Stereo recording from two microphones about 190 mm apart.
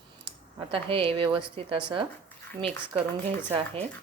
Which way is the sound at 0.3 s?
30° right (ahead or behind).